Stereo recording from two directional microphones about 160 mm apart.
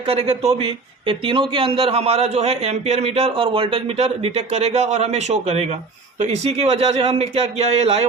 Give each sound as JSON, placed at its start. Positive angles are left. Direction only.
{"t": 0.1, "sound": "a man's voice", "side_deg": -40}